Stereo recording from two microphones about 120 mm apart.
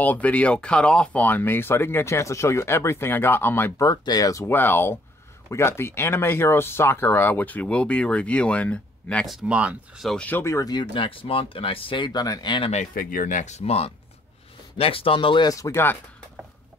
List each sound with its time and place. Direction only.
0.0 s speech: 10° left (ahead or behind)
9.3 s speech: 5° right (ahead or behind)
10.0 s speech: 10° left (ahead or behind)
10.4 s speech: 25° left (ahead or behind)
13.3 s speech: 80° left; by 15.5 s 40° left (ahead or behind)
15.5 s speech: 25° left (ahead or behind)